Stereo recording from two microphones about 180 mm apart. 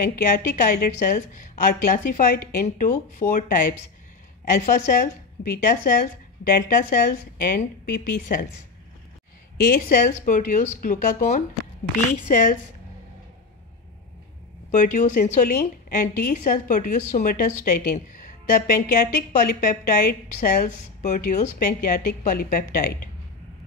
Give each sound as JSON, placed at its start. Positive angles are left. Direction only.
{"t": 0.0, "sound": "a woman's voice", "side_deg": 55}
{"t": 9.6, "sound": "a woman's voice", "side_deg": 50}
{"t": 14.7, "sound": "a woman's voice", "side_deg": 45}